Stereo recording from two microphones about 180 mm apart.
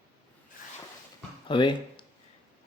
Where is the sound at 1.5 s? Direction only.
25° left (ahead or behind).